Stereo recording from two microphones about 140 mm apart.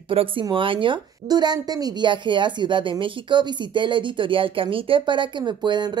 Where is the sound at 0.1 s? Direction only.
40° right (ahead or behind).